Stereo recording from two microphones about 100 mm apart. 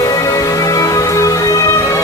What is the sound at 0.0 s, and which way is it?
Music, 35° left (ahead or behind).